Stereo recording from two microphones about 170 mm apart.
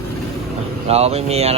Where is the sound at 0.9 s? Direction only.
35° right (ahead or behind).